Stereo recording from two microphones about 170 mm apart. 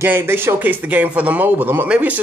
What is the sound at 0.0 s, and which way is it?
Speech, 15° right (ahead or behind).